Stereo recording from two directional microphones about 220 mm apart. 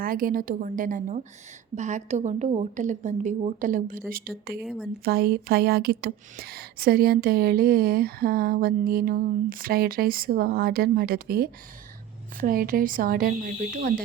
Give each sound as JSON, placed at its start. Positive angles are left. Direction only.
{"t": 0.0, "sound": "a woman's voice", "side_deg": -40}
{"t": 4.6, "sound": "speech", "side_deg": 0}
{"t": 5.0, "sound": "a woman's voice", "side_deg": -45}